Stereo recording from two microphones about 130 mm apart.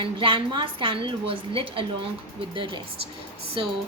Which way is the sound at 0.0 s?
40° right (ahead or behind).